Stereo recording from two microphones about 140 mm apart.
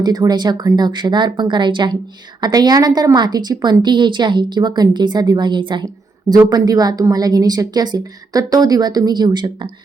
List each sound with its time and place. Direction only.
0.0 s a woman's voice: 30° right (ahead or behind)